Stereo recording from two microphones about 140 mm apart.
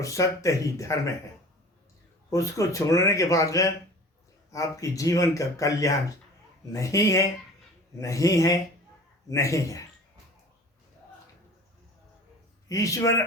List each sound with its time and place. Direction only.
0.0 s speech: 25° left (ahead or behind)
2.3 s speech: 25° left (ahead or behind)
12.6 s speech: 25° left (ahead or behind)